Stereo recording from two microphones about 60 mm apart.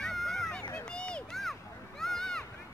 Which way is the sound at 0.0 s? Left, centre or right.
Centre.